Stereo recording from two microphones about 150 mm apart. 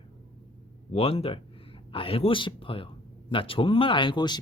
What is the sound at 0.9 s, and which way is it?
Speech, 40° left (ahead or behind).